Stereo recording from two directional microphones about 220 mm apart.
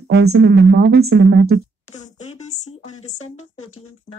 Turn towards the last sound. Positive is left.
turn(degrees=75)  # may be behind; listen again after turning